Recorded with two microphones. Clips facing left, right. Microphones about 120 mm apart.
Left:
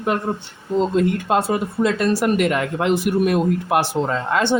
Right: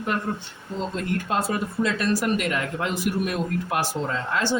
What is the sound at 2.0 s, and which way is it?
Speech, 55° left (ahead or behind).